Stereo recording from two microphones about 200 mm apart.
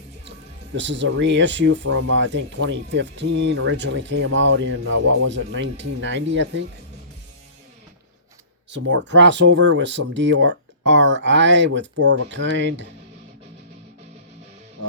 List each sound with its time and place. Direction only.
0.3 s speech: 65° right (ahead or behind)
8.7 s speech: 60° right (ahead or behind)